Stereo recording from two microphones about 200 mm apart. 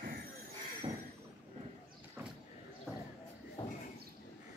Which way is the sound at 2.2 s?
10° right (ahead or behind).